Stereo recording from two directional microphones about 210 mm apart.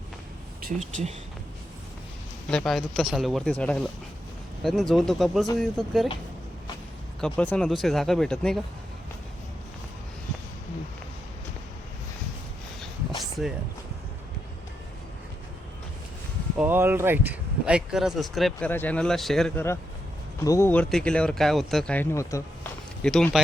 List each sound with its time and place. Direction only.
0.6 s speech: 35° right (ahead or behind)
2.5 s speech: 5° left (ahead or behind)
7.2 s speech: 5° left (ahead or behind)
16.6 s speech: 10° right (ahead or behind); by 22.4 s 15° left (ahead or behind)
23.0 s speech: 5° left (ahead or behind)